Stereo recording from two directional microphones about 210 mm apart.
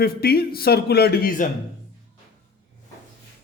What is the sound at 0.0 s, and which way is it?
A man's voice, 45° left (ahead or behind).